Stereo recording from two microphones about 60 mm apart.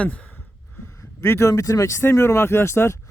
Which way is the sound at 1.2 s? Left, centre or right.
Left.